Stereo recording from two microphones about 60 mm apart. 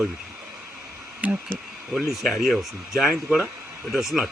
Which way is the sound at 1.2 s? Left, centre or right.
Right.